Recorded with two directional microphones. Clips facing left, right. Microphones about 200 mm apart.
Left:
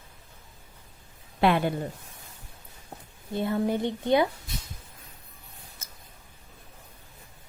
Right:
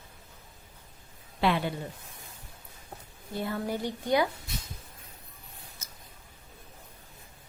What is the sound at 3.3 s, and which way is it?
Speech, 25° left (ahead or behind).